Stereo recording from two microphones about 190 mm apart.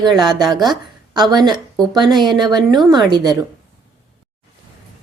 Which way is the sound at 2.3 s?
20° right (ahead or behind).